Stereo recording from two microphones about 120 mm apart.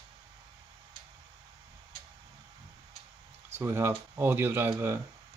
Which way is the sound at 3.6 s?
20° right (ahead or behind).